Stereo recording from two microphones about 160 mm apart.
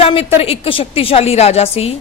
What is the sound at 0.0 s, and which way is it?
A woman's voice, 35° left (ahead or behind).